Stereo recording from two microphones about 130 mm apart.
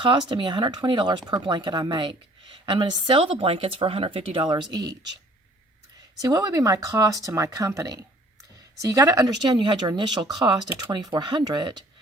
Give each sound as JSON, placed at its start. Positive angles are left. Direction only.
{"t": 0.0, "sound": "speech", "side_deg": -35}
{"t": 4.7, "sound": "speech", "side_deg": -30}
{"t": 6.2, "sound": "speech", "side_deg": -25}